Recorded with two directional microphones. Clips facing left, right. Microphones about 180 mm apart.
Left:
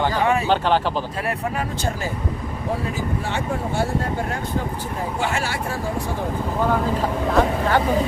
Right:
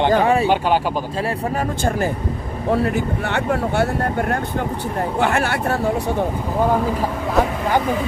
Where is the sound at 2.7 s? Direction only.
65° right (ahead or behind).